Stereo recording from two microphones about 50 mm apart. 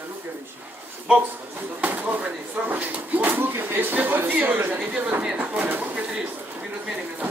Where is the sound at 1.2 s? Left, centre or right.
Right.